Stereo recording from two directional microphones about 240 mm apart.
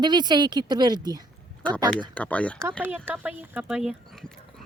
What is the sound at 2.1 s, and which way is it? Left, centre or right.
Speech, centre.